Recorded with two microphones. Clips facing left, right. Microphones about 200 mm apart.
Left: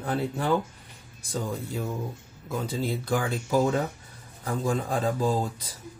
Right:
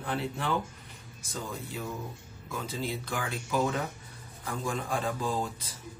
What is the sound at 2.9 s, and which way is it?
Speech, 35° left (ahead or behind).